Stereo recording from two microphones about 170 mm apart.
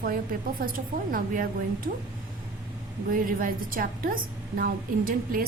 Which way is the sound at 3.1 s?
55° right (ahead or behind).